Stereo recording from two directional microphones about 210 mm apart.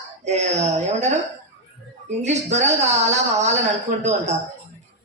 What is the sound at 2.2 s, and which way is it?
A woman's voice, 30° right (ahead or behind).